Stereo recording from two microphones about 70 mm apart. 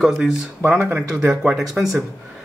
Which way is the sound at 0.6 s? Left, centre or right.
Right.